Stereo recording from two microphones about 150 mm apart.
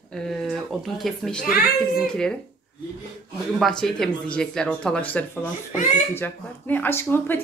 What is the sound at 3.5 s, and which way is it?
A woman's voice, centre (ahead or behind).